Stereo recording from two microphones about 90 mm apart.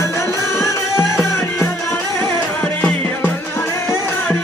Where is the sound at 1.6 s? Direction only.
30° left (ahead or behind).